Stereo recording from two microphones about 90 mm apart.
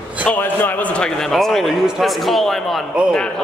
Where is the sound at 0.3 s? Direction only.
25° left (ahead or behind).